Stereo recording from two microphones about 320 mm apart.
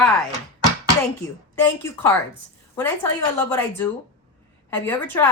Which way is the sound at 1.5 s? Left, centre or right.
Centre.